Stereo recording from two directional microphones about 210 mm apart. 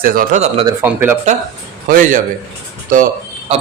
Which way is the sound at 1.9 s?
40° right (ahead or behind).